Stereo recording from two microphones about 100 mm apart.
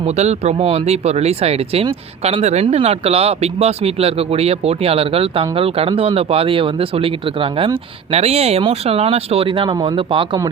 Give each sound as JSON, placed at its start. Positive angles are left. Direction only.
{"t": 0.0, "sound": "speech", "side_deg": -90}